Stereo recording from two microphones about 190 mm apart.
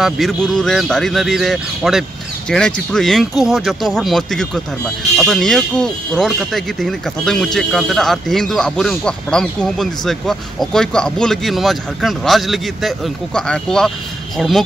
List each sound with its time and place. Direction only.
0.0 s speech: centre (ahead or behind)